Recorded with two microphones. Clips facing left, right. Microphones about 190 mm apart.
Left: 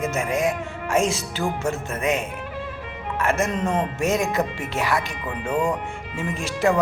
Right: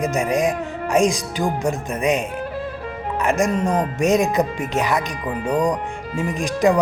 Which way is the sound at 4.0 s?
15° right (ahead or behind).